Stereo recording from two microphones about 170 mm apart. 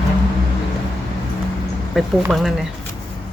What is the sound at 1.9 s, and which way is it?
Speech, centre (ahead or behind).